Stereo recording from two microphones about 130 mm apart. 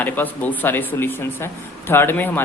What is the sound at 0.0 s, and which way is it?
Speech, 15° left (ahead or behind).